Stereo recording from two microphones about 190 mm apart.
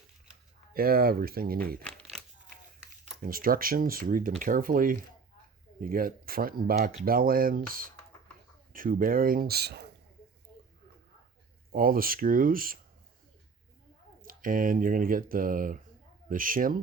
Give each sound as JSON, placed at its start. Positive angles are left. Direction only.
{"t": 0.7, "sound": "speech", "side_deg": -50}
{"t": 1.8, "sound": "crumpling", "side_deg": 0}
{"t": 3.2, "sound": "speech", "side_deg": -50}
{"t": 11.7, "sound": "speech", "side_deg": -50}
{"t": 14.2, "sound": "speech", "side_deg": -45}